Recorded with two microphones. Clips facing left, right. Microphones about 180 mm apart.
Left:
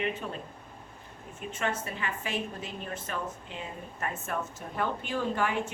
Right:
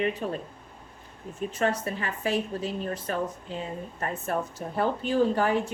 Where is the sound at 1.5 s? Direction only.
35° right (ahead or behind).